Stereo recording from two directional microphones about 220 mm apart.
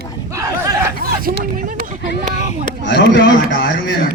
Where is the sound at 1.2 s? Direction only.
40° right (ahead or behind).